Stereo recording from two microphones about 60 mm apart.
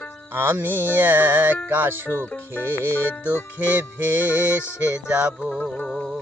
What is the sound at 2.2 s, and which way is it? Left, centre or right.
Music, left.